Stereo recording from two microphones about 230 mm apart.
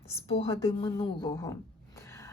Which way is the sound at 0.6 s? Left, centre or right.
Left.